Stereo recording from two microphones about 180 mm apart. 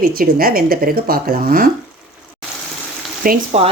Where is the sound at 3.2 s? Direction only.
50° right (ahead or behind).